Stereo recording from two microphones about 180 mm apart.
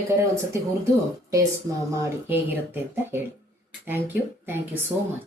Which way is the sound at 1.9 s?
15° right (ahead or behind).